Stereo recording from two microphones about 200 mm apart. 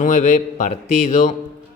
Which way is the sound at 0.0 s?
35° left (ahead or behind).